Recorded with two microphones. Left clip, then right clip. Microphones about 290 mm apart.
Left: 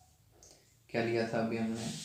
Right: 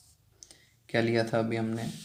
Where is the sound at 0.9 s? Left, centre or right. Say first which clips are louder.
Right 5 dB; right.